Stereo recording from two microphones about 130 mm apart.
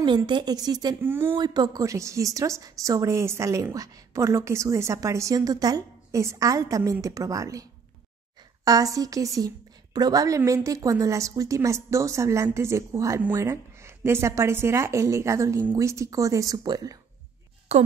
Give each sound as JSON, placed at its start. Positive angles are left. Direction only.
{"t": 0.0, "sound": "a woman's voice", "side_deg": -35}
{"t": 1.0, "sound": "speech", "side_deg": -15}
{"t": 1.3, "sound": "a woman's voice", "side_deg": -30}
{"t": 8.6, "sound": "a woman's voice", "side_deg": -25}
{"t": 17.7, "sound": "a woman's voice", "side_deg": -50}